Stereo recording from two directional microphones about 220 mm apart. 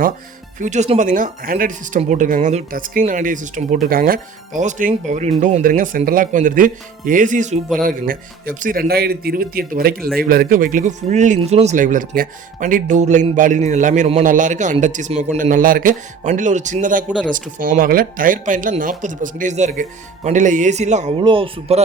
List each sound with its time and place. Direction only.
0.6 s speech: 30° right (ahead or behind)